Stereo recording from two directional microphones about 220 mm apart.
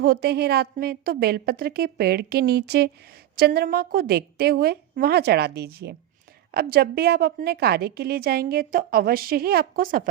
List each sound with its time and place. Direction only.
0.0 s a woman's voice: 45° right (ahead or behind)